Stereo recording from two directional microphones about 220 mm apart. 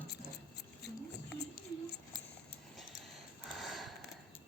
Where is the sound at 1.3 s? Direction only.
50° left (ahead or behind).